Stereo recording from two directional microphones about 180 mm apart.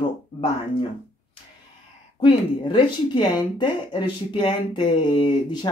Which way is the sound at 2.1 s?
25° left (ahead or behind).